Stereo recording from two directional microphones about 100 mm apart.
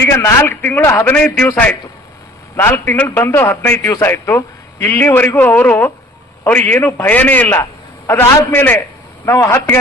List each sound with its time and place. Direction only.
0.0 s a man's voice: 25° left (ahead or behind)
2.6 s a man's voice: 20° left (ahead or behind)
3.8 s a man's voice: 35° left (ahead or behind); by 7.6 s 15° left (ahead or behind)
7.6 s a man's voice: 30° left (ahead or behind)